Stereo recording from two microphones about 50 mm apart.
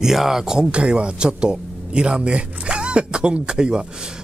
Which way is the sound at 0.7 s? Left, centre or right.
Right.